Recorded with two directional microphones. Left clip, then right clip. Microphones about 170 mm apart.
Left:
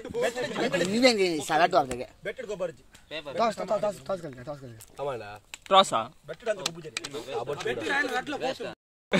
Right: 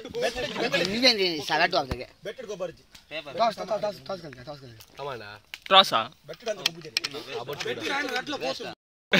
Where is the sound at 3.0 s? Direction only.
45° left (ahead or behind).